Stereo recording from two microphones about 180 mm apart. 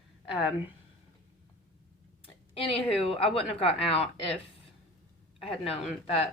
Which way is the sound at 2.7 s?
30° left (ahead or behind).